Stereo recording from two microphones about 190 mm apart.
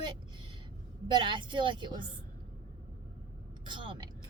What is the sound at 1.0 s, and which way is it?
Speech, 25° right (ahead or behind).